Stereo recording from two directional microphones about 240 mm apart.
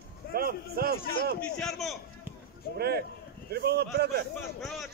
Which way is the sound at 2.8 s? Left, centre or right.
Right.